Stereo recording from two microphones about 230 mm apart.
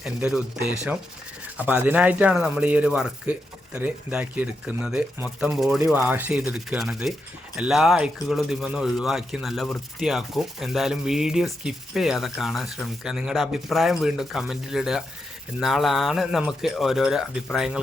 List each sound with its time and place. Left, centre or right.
0.0 s speech: centre